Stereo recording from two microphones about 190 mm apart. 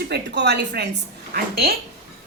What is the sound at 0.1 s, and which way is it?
A woman's voice, 65° right (ahead or behind).